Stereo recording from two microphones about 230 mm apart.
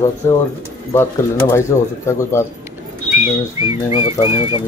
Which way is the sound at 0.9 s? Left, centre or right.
Centre.